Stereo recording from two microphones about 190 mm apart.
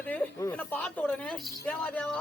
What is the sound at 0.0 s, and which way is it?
A man's voice, 10° left (ahead or behind).